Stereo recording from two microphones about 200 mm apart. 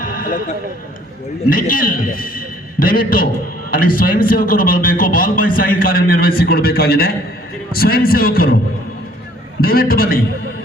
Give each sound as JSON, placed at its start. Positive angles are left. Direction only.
{"t": 0.0, "sound": "a sound", "side_deg": 45}
{"t": 1.5, "sound": "a man's voice", "side_deg": 45}
{"t": 9.6, "sound": "a man's voice", "side_deg": 50}